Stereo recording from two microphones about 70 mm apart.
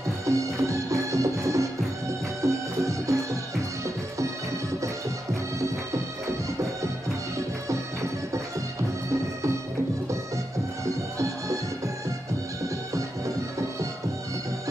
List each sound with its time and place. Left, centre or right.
0.3 s music: right
5.3 s music: right
7.3 s music: right
11.1 s music: right